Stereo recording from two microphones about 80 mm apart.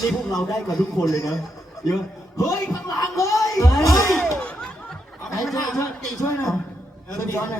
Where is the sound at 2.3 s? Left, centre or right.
Left.